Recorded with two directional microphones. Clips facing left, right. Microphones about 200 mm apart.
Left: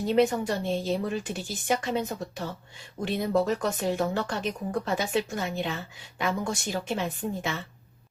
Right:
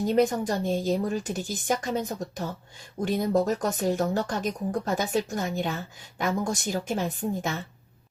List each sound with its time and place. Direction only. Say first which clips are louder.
0.0 s speech: even; 45° right (ahead or behind)